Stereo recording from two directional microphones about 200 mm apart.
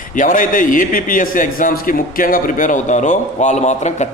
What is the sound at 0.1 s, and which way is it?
A man's voice, 40° left (ahead or behind).